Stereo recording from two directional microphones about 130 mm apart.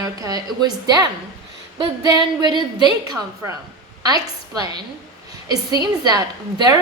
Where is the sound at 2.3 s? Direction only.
35° right (ahead or behind).